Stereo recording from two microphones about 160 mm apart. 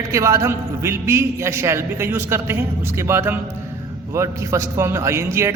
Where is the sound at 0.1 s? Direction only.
20° right (ahead or behind).